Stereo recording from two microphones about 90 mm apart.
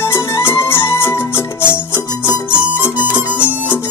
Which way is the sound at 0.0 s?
30° left (ahead or behind).